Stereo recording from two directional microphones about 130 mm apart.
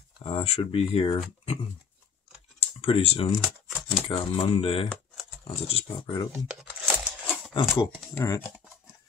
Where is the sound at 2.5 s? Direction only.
50° left (ahead or behind).